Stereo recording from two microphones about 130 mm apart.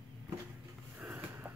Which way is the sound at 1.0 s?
15° right (ahead or behind).